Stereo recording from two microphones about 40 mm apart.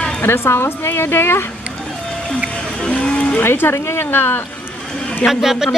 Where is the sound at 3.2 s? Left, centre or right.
Left.